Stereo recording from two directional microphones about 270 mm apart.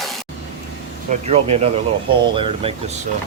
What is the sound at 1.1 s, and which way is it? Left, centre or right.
Speech, right.